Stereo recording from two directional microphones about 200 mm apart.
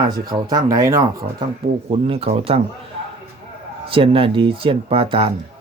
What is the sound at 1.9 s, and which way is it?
Speech, 30° right (ahead or behind).